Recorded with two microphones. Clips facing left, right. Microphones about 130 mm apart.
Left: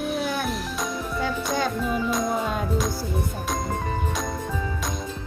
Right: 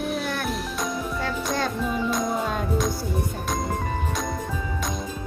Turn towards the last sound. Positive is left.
turn(degrees=0)  # may be behind; listen again after turning